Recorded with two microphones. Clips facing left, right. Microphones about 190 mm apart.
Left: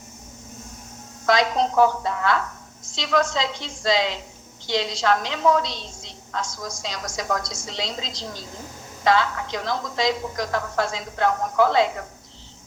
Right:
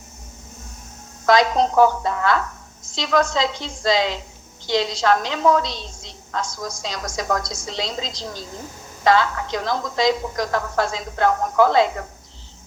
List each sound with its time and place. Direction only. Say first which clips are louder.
1.3 s a woman's voice: right 4 dB; 40° right (ahead or behind)